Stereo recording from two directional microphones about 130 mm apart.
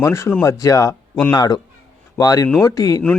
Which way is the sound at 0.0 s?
20° left (ahead or behind).